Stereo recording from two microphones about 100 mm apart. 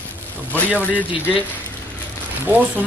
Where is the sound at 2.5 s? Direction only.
20° right (ahead or behind).